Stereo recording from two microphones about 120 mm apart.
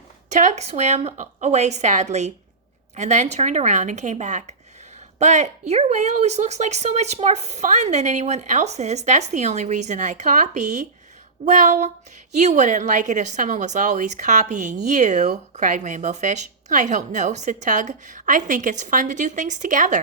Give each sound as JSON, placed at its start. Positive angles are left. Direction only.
{"t": 0.3, "sound": "a woman's voice", "side_deg": -85}
{"t": 5.2, "sound": "a woman's voice", "side_deg": -75}
{"t": 12.3, "sound": "a woman's voice", "side_deg": -75}